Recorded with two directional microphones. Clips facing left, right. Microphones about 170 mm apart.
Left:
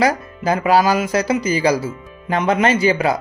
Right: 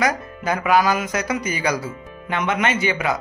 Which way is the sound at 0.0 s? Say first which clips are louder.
Left 4 dB; 30° left (ahead or behind).